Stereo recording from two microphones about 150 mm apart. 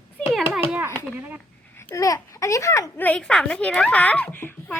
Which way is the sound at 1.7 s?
15° left (ahead or behind).